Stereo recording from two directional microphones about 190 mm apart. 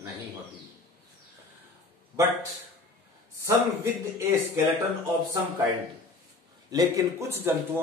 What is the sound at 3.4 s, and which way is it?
A man's voice, 15° right (ahead or behind).